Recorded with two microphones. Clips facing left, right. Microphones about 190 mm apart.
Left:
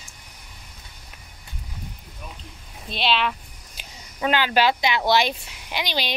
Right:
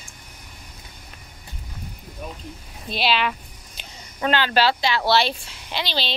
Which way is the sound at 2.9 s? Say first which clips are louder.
Right 1 dB; 5° right (ahead or behind).